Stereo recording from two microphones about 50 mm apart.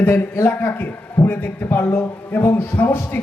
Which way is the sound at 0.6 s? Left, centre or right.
Left.